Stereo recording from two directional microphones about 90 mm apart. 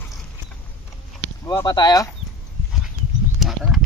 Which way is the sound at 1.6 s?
55° left (ahead or behind).